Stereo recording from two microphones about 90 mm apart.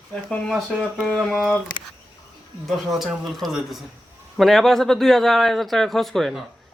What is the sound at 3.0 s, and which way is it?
A man's voice, centre (ahead or behind).